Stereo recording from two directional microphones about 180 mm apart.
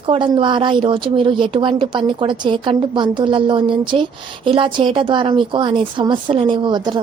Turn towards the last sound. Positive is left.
turn(degrees=-25)  # may be behind; listen again after turning